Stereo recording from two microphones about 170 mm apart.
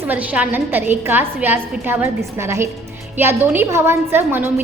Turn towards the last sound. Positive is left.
turn(degrees=-10)  # may be behind; listen again after turning